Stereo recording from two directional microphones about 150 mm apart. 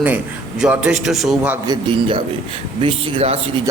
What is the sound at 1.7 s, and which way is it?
Speech, 35° right (ahead or behind).